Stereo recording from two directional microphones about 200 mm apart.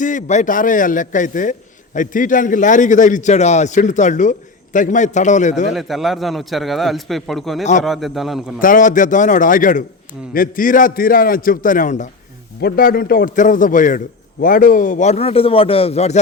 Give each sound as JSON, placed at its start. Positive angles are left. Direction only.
{"t": 0.0, "sound": "a man's voice", "side_deg": 40}
{"t": 5.7, "sound": "a man's voice", "side_deg": 0}
{"t": 7.6, "sound": "a man's voice", "side_deg": 35}
{"t": 7.9, "sound": "a man's voice", "side_deg": 0}
{"t": 8.6, "sound": "a man's voice", "side_deg": 40}